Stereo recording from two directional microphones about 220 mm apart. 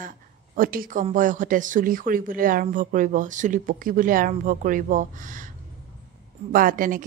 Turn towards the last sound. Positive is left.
turn(degrees=-35)  # may be behind; listen again after turning